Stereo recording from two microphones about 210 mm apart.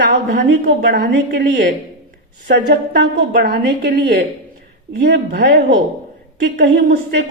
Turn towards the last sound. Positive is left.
turn(degrees=-50)  # may be behind; listen again after turning